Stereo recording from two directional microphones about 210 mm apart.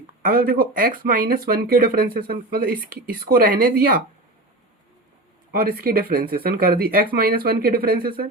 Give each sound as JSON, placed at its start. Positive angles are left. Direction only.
{"t": 0.2, "sound": "speech", "side_deg": -45}
{"t": 5.5, "sound": "speech", "side_deg": -45}